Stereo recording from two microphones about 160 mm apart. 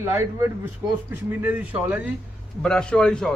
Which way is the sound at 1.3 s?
10° right (ahead or behind).